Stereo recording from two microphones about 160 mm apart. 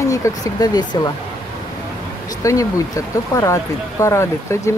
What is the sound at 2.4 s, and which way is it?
Speech, 20° left (ahead or behind).